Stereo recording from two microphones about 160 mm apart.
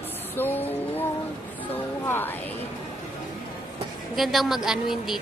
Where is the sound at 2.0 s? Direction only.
15° left (ahead or behind).